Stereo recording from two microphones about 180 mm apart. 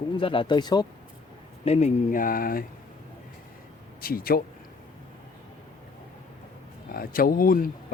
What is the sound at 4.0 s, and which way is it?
Speech, 55° left (ahead or behind).